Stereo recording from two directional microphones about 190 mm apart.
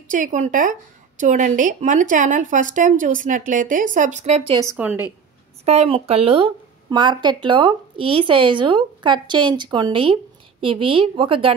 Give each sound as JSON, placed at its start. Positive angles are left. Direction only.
{"t": 0.1, "sound": "a woman's voice", "side_deg": -40}
{"t": 4.6, "sound": "a woman's voice", "side_deg": -10}
{"t": 5.7, "sound": "speech", "side_deg": -30}